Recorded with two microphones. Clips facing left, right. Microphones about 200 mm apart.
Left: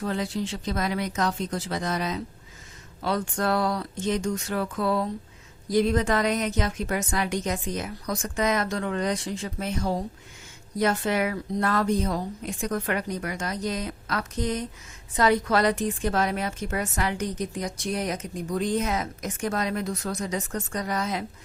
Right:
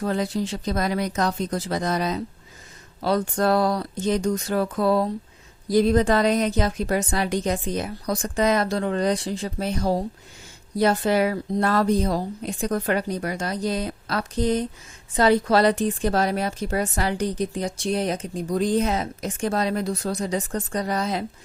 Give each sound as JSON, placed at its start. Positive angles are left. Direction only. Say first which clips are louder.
{"t": 0.0, "sound": "a woman's voice", "louder": "right 4 dB", "side_deg": -40}